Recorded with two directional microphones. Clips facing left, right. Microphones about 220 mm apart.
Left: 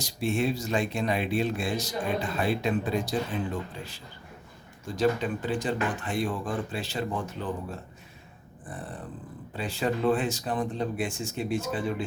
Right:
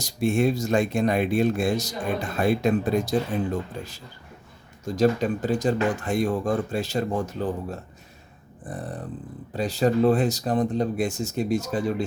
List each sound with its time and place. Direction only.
0.0 s speech: 45° right (ahead or behind)
9.5 s speech: 40° right (ahead or behind)